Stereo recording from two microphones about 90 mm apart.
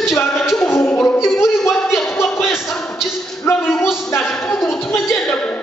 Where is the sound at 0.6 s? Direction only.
25° left (ahead or behind).